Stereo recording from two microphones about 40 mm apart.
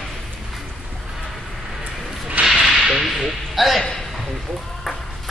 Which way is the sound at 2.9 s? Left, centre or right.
Centre.